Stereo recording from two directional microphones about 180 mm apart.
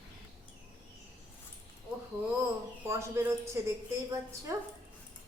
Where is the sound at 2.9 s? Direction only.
15° right (ahead or behind).